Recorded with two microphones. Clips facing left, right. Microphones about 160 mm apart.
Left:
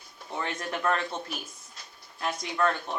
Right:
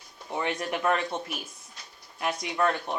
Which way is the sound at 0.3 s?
15° right (ahead or behind).